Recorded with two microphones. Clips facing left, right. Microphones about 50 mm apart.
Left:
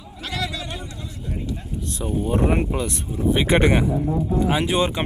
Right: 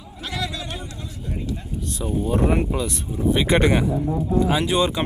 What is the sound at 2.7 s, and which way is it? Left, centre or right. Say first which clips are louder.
Speech: even; left.